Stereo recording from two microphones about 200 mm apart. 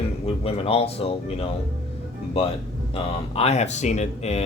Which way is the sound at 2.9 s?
30° left (ahead or behind).